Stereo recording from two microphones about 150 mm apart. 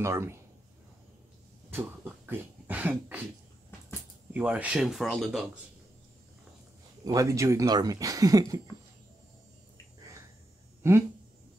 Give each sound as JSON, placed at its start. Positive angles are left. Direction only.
{"t": 0.0, "sound": "a man's voice", "side_deg": -20}
{"t": 1.7, "sound": "a sound", "side_deg": -15}
{"t": 4.3, "sound": "speech", "side_deg": -10}
{"t": 7.1, "sound": "speech", "side_deg": -20}
{"t": 10.8, "sound": "speech", "side_deg": -20}